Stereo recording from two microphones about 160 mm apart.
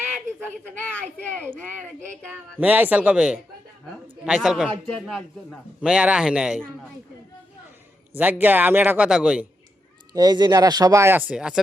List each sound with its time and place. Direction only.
0.7 s a woman's voice: 10° left (ahead or behind)
2.6 s a man's voice: 10° right (ahead or behind)
8.2 s speech: 10° right (ahead or behind)
10.1 s speech: 25° right (ahead or behind); by 11.6 s 5° right (ahead or behind)